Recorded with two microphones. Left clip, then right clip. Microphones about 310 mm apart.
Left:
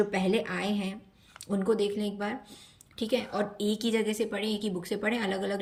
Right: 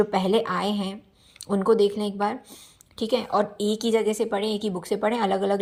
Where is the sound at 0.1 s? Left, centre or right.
Centre.